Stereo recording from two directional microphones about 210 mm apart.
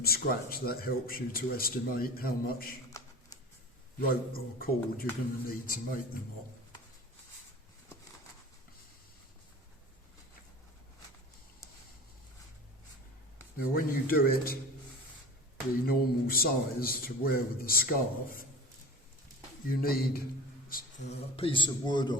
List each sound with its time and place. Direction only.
0.0 s speech: 45° left (ahead or behind)
4.1 s speech: 45° left (ahead or behind)
13.6 s speech: 45° left (ahead or behind)
15.9 s speech: 45° left (ahead or behind)
19.6 s speech: 45° left (ahead or behind)
20.7 s a sound: 40° left (ahead or behind)
21.3 s a man's voice: 25° left (ahead or behind)